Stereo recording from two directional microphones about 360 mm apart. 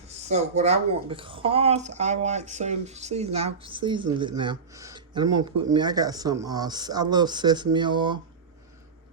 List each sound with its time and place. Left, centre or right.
0.3 s speech: centre